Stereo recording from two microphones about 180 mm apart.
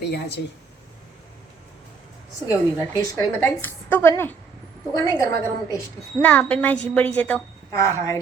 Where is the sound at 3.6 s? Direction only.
15° left (ahead or behind).